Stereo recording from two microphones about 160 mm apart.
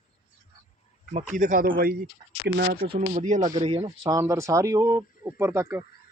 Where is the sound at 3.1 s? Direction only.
50° right (ahead or behind).